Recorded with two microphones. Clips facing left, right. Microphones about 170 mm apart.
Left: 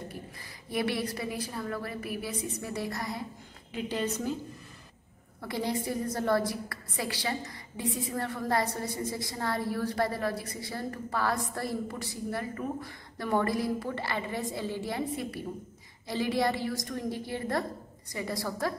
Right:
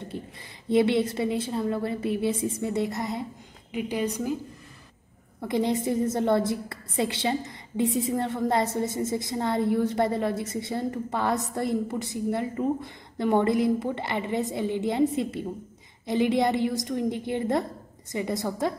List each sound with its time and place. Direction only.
0.1 s a sound: 25° right (ahead or behind)
0.7 s a woman's voice: 25° right (ahead or behind)
5.4 s a woman's voice: 20° right (ahead or behind)